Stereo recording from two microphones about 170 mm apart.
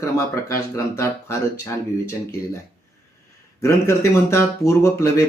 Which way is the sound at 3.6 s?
15° left (ahead or behind).